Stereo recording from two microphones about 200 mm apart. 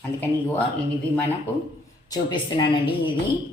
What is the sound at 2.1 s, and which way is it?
A woman's voice, 20° left (ahead or behind).